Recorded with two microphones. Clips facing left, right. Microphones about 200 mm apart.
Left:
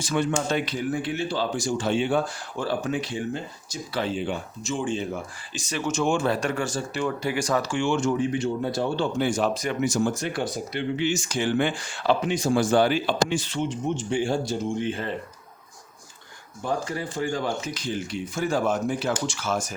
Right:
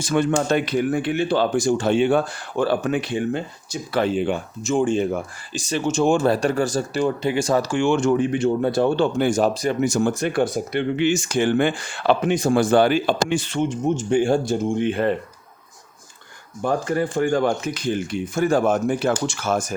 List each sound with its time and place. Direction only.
0.0 s speech: 50° right (ahead or behind)
5.5 s speech: 30° right (ahead or behind)
7.2 s speech: 25° right (ahead or behind)
9.8 s speech: 55° right (ahead or behind)
16.6 s speech: 55° right (ahead or behind)